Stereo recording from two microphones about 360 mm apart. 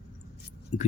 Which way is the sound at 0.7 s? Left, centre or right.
Centre.